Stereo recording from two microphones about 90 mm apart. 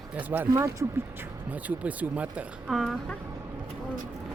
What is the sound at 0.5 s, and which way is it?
Speech, 35° right (ahead or behind).